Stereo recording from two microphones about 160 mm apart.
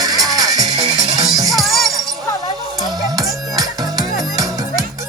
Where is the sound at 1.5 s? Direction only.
Centre (ahead or behind).